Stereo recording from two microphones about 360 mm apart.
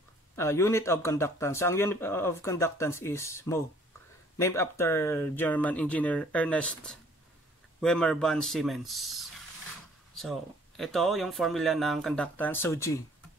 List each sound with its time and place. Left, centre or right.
0.4 s speech: centre
10.8 s speech: centre